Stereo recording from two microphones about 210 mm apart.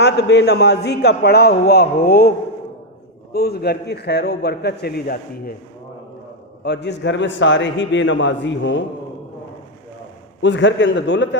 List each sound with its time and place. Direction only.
0.0 s a man's voice: 55° left (ahead or behind)
3.3 s a man's voice: 50° left (ahead or behind)
6.7 s a man's voice: 55° left (ahead or behind)
10.4 s a man's voice: 60° left (ahead or behind)